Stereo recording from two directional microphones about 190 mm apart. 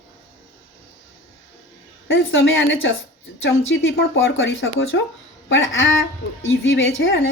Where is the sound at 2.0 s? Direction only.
90° left.